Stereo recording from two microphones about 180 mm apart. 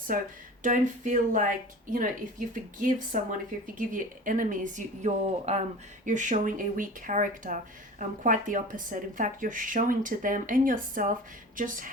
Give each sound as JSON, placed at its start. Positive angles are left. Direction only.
{"t": 0.1, "sound": "speech", "side_deg": -50}
{"t": 3.1, "sound": "speech", "side_deg": -50}